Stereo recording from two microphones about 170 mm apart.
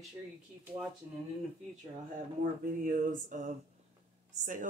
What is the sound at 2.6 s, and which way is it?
Speech, 55° right (ahead or behind).